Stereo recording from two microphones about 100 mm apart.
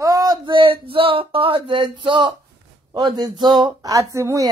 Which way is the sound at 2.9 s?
40° right (ahead or behind).